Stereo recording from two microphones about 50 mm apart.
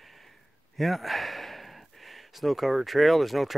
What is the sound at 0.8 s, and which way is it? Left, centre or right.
Speech, centre.